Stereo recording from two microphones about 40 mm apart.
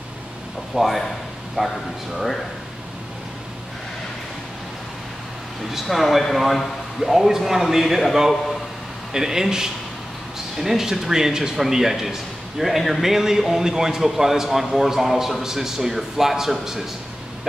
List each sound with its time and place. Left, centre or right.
0.7 s speech: centre
1.6 s a man's voice: centre
5.7 s a man's voice: centre